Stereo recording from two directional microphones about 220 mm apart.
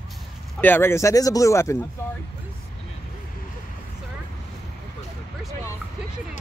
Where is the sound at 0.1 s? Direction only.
10° left (ahead or behind).